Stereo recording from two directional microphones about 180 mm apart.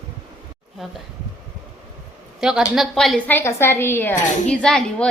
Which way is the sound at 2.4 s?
Centre (ahead or behind).